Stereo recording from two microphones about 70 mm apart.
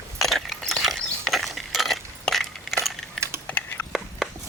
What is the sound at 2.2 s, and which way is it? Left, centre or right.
Crushing, centre.